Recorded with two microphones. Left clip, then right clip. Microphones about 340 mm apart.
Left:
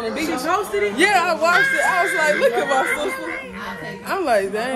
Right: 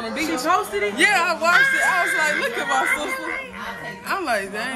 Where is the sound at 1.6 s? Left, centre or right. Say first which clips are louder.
Left 1 dB; centre.